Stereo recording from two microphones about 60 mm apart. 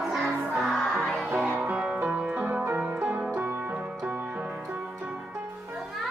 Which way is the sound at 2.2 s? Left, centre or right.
Centre.